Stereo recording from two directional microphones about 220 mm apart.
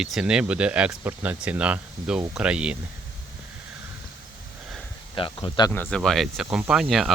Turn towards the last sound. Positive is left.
turn(degrees=0)  # may be behind; listen again after turning